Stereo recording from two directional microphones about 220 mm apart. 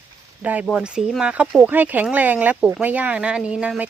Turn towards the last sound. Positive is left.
turn(degrees=-5)  # may be behind; listen again after turning